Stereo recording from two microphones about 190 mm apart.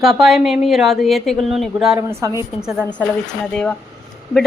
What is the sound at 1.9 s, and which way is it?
Speech, 15° right (ahead or behind).